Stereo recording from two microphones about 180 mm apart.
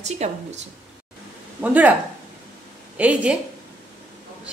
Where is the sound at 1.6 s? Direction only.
10° right (ahead or behind).